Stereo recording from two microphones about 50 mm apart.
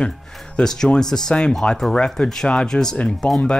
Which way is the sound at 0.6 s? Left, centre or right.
Centre.